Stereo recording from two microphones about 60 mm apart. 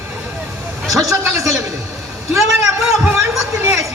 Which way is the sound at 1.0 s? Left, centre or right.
Right.